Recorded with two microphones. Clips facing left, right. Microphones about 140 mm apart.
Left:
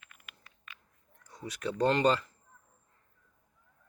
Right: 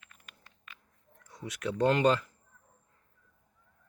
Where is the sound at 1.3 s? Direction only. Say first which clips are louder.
Right 1 dB; centre (ahead or behind).